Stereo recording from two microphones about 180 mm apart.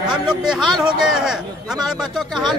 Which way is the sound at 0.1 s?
5° right (ahead or behind).